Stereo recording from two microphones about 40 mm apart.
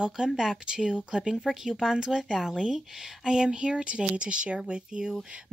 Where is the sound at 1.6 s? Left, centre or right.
Centre.